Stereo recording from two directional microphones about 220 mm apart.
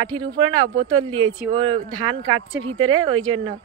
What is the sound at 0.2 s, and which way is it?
Speech, 20° right (ahead or behind).